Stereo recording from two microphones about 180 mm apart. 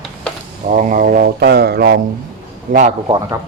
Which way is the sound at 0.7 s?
45° right (ahead or behind).